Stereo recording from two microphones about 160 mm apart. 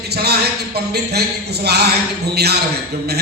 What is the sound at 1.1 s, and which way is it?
A man's voice, 90° right.